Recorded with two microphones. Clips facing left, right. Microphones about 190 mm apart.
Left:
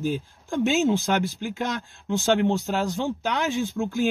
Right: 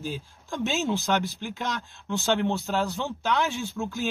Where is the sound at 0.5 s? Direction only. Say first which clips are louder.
Left 6 dB; 15° left (ahead or behind).